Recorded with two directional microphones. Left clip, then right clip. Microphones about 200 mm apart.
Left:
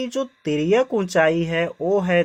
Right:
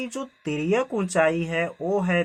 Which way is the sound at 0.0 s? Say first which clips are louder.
Left 7 dB; 25° left (ahead or behind).